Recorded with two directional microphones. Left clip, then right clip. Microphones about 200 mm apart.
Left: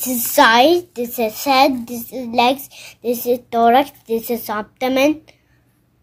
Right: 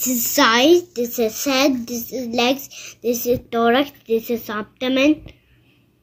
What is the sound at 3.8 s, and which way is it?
Speech, 90° left.